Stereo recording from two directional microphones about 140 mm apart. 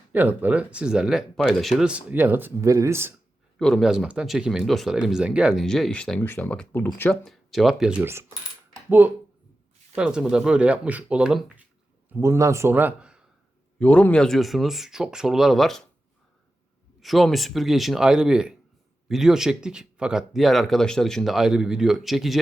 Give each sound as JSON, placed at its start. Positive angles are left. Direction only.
{"t": 0.1, "sound": "speech", "side_deg": -15}
{"t": 3.6, "sound": "speech", "side_deg": 0}
{"t": 5.6, "sound": "speech", "side_deg": 5}
{"t": 7.1, "sound": "speech", "side_deg": 0}
{"t": 8.0, "sound": "speech", "side_deg": -20}
{"t": 12.0, "sound": "a man's voice", "side_deg": -15}
{"t": 13.7, "sound": "speech", "side_deg": 10}
{"t": 17.0, "sound": "speech", "side_deg": 0}